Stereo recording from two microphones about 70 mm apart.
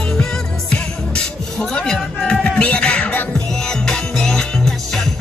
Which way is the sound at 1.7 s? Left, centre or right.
Centre.